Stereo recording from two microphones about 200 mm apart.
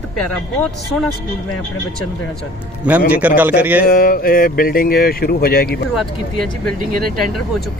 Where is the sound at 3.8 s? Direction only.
45° left (ahead or behind).